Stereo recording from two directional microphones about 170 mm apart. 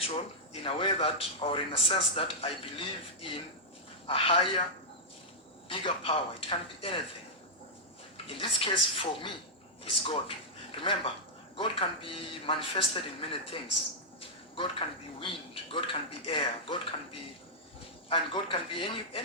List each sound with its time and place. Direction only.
0.0 s a man's voice: 35° left (ahead or behind)
5.6 s a man's voice: 30° left (ahead or behind)
8.3 s a man's voice: 30° left (ahead or behind)